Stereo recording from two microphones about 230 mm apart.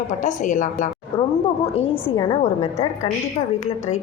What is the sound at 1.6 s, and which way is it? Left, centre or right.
Speech, left.